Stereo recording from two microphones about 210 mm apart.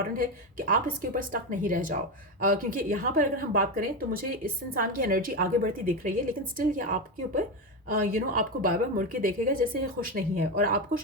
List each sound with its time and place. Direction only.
0.2 s a woman's voice: 40° right (ahead or behind)